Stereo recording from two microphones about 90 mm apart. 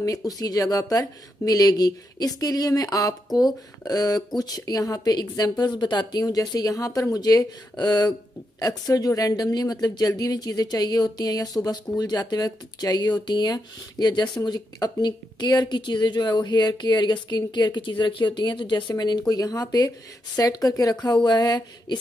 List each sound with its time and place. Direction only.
0.0 s speech: 40° left (ahead or behind); by 8.1 s 55° left (ahead or behind)
8.5 s speech: 40° left (ahead or behind)